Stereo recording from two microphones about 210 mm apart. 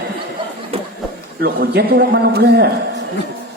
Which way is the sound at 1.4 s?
50° right (ahead or behind).